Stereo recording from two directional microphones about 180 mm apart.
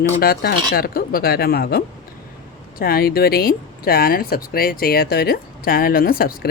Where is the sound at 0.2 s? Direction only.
60° left (ahead or behind).